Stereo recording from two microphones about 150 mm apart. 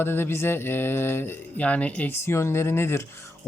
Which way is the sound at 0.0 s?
15° left (ahead or behind).